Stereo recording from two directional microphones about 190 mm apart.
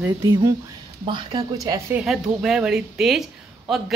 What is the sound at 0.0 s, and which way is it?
A woman's voice, 15° right (ahead or behind).